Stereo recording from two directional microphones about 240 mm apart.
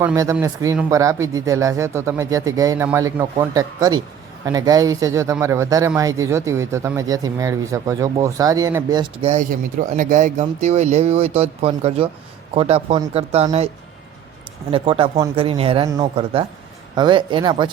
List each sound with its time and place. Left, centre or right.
0.0 s speech: centre
14.7 s speech: right